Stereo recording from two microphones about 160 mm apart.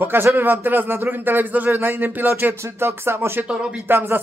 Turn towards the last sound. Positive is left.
turn(degrees=-15)  # may be behind; listen again after turning